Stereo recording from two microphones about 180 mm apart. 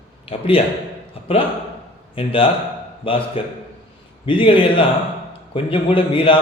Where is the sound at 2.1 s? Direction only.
30° left (ahead or behind).